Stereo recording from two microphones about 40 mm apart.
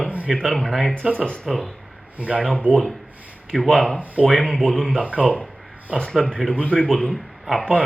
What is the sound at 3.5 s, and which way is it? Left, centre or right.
Speech, centre.